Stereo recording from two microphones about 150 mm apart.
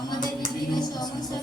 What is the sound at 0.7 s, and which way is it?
Speech, 25° left (ahead or behind).